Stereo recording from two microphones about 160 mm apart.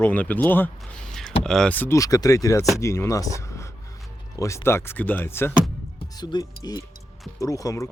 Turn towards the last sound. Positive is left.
turn(degrees=20)  # may be behind; listen again after turning